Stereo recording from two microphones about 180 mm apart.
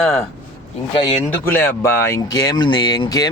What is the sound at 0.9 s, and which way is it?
Speech, 25° left (ahead or behind).